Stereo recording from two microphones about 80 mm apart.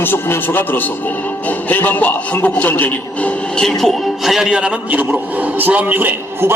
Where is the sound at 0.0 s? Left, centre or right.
Left.